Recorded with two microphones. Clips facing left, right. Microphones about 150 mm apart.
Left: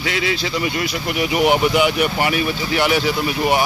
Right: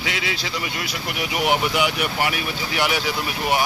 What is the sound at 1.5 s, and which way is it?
Speech, centre (ahead or behind).